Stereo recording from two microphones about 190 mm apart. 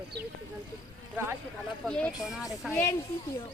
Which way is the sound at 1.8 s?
5° left (ahead or behind).